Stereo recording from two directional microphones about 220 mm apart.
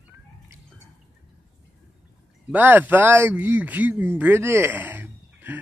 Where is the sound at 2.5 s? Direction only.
10° right (ahead or behind).